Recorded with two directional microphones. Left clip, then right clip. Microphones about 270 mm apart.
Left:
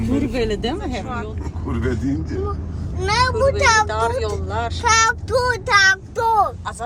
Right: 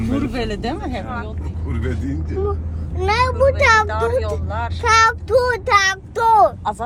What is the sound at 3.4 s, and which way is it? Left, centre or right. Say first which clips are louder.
Speech: right 3 dB; right.